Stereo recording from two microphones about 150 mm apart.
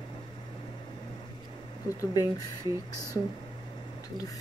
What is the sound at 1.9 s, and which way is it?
Speech, 20° left (ahead or behind).